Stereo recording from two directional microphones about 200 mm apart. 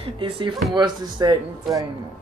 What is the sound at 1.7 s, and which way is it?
Speech, centre (ahead or behind).